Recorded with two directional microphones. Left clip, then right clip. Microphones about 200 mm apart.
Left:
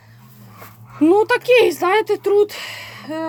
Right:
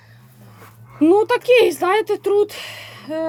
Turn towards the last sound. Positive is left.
turn(degrees=-5)  # may be behind; listen again after turning